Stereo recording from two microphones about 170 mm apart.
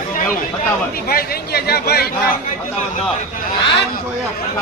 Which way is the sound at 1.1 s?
65° left (ahead or behind).